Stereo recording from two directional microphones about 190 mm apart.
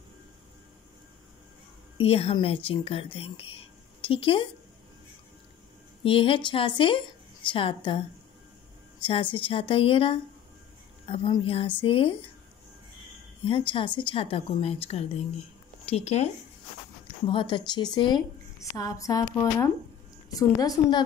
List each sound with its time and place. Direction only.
2.0 s speech: 30° left (ahead or behind)
6.0 s a woman's voice: 30° left (ahead or behind)
9.0 s a woman's voice: 25° left (ahead or behind)
13.5 s a woman's voice: 30° left (ahead or behind)
17.3 s a woman's voice: 25° left (ahead or behind)